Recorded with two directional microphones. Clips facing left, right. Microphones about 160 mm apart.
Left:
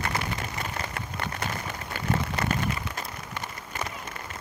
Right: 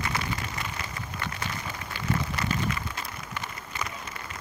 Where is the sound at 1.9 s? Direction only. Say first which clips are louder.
Left 2 dB; 50° left (ahead or behind).